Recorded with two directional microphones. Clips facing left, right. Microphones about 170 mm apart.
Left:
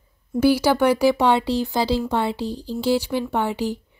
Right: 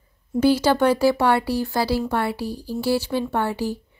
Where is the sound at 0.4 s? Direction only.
10° left (ahead or behind).